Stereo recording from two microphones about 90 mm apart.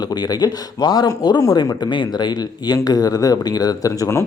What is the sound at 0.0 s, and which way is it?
Speech, 50° left (ahead or behind).